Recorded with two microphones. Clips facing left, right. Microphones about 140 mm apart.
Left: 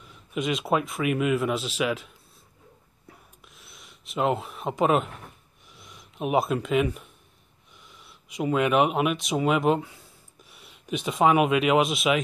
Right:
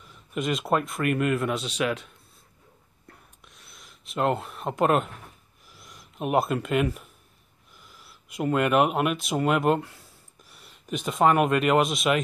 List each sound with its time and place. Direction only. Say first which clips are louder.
0.0 s speech: even; centre (ahead or behind)
3.1 s a sound: left 1 dB; centre (ahead or behind)
5.7 s speech: left 1 dB; centre (ahead or behind)